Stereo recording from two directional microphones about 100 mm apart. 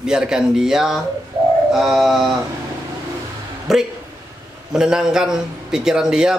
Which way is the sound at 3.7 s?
5° right (ahead or behind).